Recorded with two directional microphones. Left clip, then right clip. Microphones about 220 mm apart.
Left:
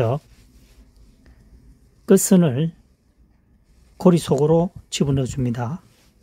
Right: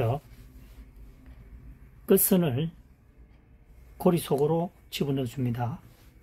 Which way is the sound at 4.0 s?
45° left (ahead or behind).